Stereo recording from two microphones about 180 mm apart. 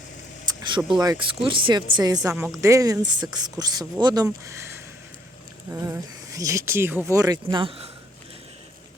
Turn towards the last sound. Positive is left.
turn(degrees=-30)  # may be behind; listen again after turning